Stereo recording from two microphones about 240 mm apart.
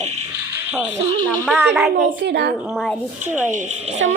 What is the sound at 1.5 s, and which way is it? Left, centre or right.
Speech, centre.